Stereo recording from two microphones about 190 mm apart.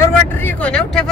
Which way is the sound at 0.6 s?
5° left (ahead or behind).